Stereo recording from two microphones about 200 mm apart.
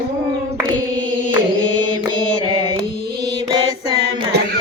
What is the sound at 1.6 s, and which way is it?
Mantra, 20° right (ahead or behind).